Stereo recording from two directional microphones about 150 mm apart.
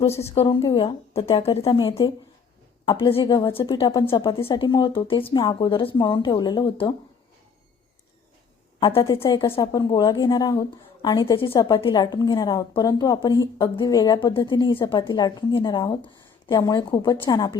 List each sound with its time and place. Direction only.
0.0 s speech: 20° left (ahead or behind)
0.3 s a woman's voice: 35° left (ahead or behind)
8.8 s a woman's voice: 30° left (ahead or behind)